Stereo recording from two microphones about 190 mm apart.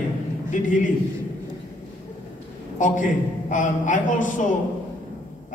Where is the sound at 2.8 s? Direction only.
40° left (ahead or behind).